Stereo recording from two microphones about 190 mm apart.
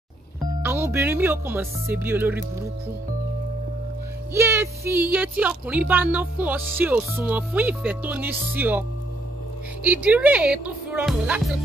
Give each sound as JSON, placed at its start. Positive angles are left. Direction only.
{"t": 0.4, "sound": "speech", "side_deg": -15}
{"t": 4.3, "sound": "speech", "side_deg": -15}
{"t": 9.8, "sound": "speech", "side_deg": -5}